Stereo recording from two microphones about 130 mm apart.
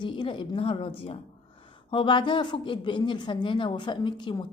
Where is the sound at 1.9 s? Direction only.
40° left (ahead or behind).